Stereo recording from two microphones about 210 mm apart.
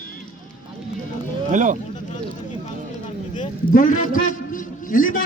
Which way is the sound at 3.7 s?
40° left (ahead or behind).